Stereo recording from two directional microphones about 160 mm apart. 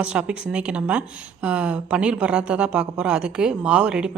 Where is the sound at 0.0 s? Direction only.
5° right (ahead or behind).